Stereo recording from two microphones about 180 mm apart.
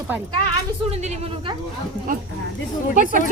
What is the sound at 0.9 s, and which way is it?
Speech, 35° right (ahead or behind).